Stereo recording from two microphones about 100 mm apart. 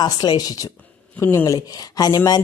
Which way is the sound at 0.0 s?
45° left (ahead or behind).